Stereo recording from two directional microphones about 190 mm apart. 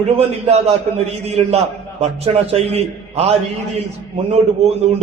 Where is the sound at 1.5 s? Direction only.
35° right (ahead or behind).